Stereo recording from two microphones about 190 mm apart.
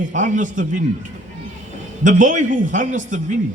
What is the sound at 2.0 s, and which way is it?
A man's voice, 45° right (ahead or behind).